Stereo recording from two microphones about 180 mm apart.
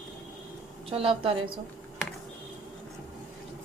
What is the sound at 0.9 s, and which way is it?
Speech, 30° right (ahead or behind).